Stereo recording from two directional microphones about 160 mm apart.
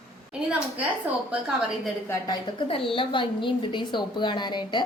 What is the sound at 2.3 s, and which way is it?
A woman's voice, 35° left (ahead or behind).